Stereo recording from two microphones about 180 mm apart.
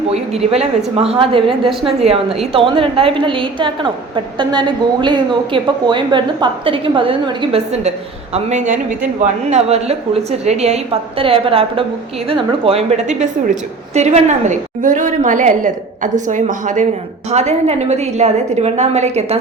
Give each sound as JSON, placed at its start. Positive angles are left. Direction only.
{"t": 0.1, "sound": "a woman's voice", "side_deg": -35}